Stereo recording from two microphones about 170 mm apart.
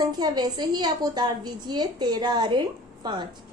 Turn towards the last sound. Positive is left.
turn(degrees=-25)  # may be behind; listen again after turning